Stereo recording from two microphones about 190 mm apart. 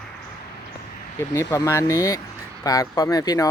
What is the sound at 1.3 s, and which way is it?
Speech, 15° left (ahead or behind).